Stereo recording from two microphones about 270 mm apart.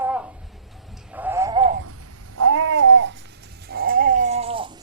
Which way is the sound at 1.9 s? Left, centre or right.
Right.